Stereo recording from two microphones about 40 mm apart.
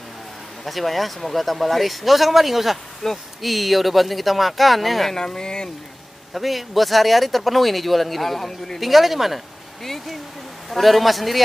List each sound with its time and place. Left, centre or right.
0.7 s speech: centre
5.1 s speech: centre
6.3 s speech: centre